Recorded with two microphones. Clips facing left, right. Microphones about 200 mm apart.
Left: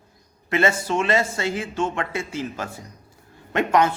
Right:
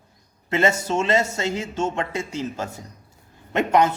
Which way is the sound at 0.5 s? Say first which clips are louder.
Even; 20° right (ahead or behind).